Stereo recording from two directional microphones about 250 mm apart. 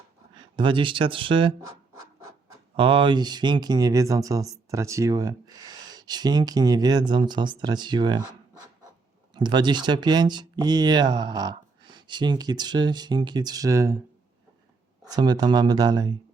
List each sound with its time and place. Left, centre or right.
0.3 s speech: centre
2.7 s speech: centre
15.0 s speech: centre